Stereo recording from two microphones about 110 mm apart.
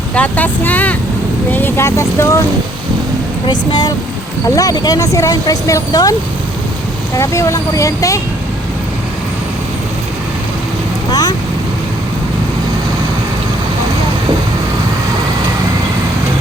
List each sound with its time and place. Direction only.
0.1 s speech: 15° left (ahead or behind)
3.4 s speech: 40° left (ahead or behind)
7.2 s speech: 30° left (ahead or behind)
11.1 s vehicle: 35° left (ahead or behind)